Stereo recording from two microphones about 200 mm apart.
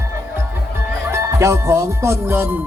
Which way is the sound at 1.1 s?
15° right (ahead or behind).